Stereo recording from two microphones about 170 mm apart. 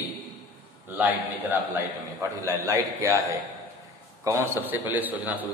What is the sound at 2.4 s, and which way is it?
Speech, 20° right (ahead or behind).